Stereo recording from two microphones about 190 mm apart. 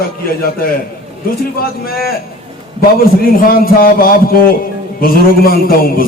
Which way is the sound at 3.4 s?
50° left (ahead or behind).